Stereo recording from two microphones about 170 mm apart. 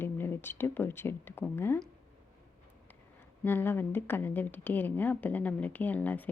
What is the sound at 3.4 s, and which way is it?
A woman's voice, 10° left (ahead or behind).